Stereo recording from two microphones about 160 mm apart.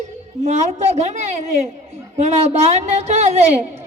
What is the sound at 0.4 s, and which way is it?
A man's voice, 45° right (ahead or behind).